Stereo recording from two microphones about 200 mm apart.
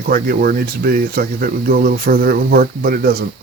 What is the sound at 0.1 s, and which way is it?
Speech, 50° right (ahead or behind).